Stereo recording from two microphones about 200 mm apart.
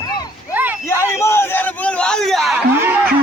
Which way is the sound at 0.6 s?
10° right (ahead or behind).